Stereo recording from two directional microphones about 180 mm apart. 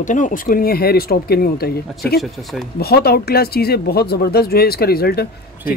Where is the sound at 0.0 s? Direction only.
45° left (ahead or behind); by 1.8 s 60° left (ahead or behind).